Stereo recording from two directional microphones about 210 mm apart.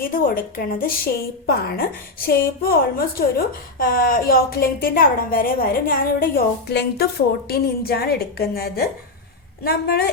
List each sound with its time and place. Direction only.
0.0 s a woman's voice: 45° left (ahead or behind)